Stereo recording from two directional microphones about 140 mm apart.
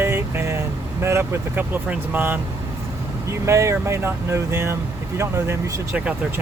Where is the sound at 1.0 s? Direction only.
15° right (ahead or behind).